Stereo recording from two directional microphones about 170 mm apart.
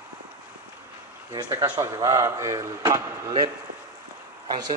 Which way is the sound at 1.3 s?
20° right (ahead or behind).